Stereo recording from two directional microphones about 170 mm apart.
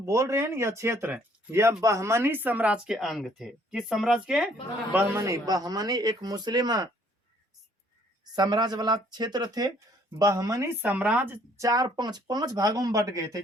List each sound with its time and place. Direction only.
0.0 s a man's voice: 20° right (ahead or behind)
8.4 s a man's voice: 25° right (ahead or behind); by 11.3 s 5° right (ahead or behind)
11.5 s a man's voice: 20° right (ahead or behind)